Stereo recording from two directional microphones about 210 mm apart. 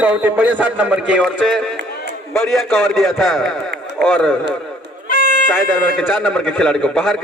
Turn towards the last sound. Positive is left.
turn(degrees=0)  # may be behind; listen again after turning